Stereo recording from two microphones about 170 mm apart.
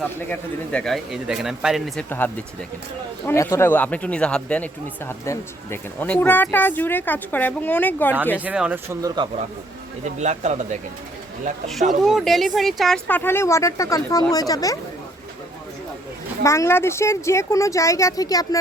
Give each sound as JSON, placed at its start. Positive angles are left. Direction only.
{"t": 0.3, "sound": "speech", "side_deg": 5}
{"t": 2.0, "sound": "speech", "side_deg": 10}
{"t": 8.4, "sound": "speech", "side_deg": -5}
{"t": 10.0, "sound": "speech", "side_deg": -45}
{"t": 11.7, "sound": "speech", "side_deg": 0}
{"t": 16.4, "sound": "speech", "side_deg": 15}